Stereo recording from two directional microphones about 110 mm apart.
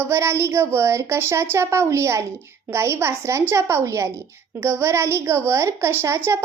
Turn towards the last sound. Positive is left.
turn(degrees=-25)  # may be behind; listen again after turning